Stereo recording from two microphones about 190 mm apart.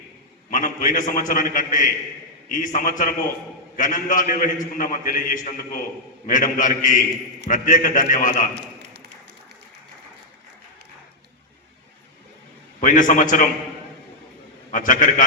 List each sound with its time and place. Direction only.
0.5 s a man's voice: 45° left (ahead or behind)
12.8 s a man's voice: 45° left (ahead or behind)
14.7 s a man's voice: 45° left (ahead or behind)